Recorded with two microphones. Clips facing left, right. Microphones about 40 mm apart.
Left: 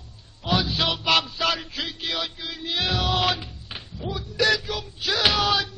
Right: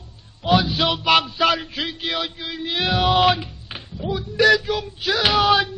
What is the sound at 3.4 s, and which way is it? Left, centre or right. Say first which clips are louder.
Music: right 3 dB; centre.